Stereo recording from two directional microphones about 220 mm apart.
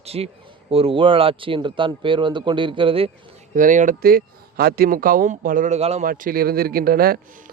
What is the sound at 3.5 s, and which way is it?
Speech, 35° right (ahead or behind).